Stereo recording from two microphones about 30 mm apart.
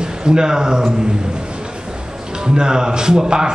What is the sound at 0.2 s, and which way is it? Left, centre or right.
Speech, right.